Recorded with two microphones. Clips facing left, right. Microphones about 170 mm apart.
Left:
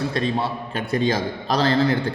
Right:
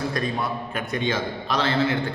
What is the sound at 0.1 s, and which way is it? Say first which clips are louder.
A man's voice: left 3 dB; 25° left (ahead or behind).